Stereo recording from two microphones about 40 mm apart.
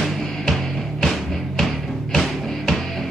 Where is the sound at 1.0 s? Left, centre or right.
Centre.